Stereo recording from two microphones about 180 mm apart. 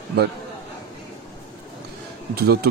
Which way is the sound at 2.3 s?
60° right (ahead or behind).